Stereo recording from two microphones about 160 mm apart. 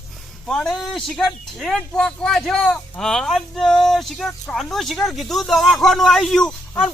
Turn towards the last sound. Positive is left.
turn(degrees=5)  # may be behind; listen again after turning